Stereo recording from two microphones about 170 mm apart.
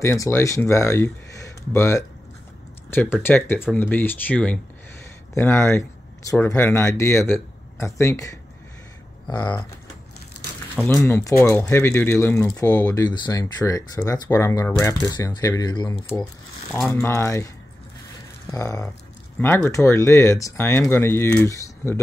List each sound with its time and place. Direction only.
0.0 s speech: 15° left (ahead or behind)
9.3 s speech: 25° left (ahead or behind)
10.8 s speech: 5° left (ahead or behind)
18.5 s speech: 20° left (ahead or behind)